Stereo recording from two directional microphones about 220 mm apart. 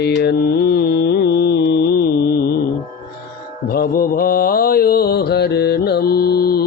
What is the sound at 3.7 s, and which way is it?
Mantra, 45° left (ahead or behind).